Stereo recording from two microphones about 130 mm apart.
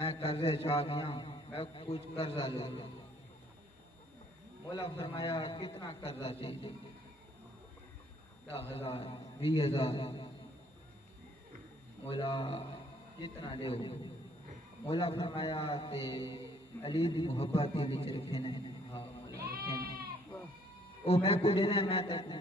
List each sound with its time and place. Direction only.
0.0 s a man's voice: 45° left (ahead or behind)
4.7 s a man's voice: 40° left (ahead or behind)
8.6 s a man's voice: 50° left (ahead or behind)
12.1 s a man's voice: 45° left (ahead or behind)
21.0 s a man's voice: 50° left (ahead or behind)